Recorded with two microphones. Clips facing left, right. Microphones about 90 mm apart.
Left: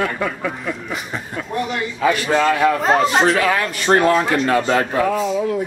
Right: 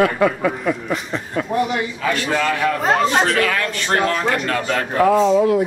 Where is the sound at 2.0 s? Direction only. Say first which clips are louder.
Left 5 dB; 15° left (ahead or behind).